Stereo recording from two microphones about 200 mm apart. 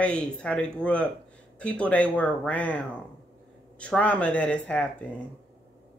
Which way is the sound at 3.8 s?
5° left (ahead or behind).